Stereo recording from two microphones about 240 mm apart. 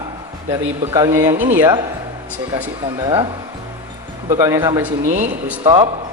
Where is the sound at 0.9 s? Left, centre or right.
Centre.